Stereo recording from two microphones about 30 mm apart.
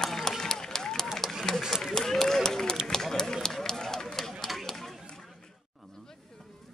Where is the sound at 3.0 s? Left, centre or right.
Centre.